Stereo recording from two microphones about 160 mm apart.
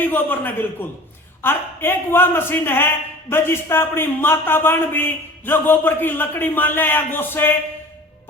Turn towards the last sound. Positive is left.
turn(degrees=10)  # may be behind; listen again after turning